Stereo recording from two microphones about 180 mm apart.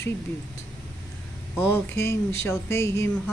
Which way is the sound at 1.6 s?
15° left (ahead or behind).